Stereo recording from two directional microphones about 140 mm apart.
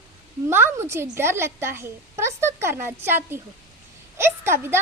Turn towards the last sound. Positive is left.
turn(degrees=-15)  # may be behind; listen again after turning